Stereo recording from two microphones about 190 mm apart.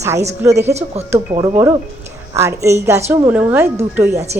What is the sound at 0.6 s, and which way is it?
Speech, 35° right (ahead or behind).